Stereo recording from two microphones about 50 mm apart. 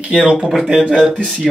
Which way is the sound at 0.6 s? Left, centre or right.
Centre.